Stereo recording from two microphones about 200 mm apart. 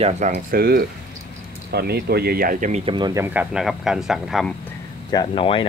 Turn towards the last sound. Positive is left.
turn(degrees=25)  # may be behind; listen again after turning